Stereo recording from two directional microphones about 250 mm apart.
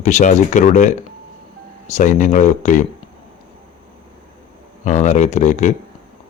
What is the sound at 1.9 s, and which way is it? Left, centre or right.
Speech, left.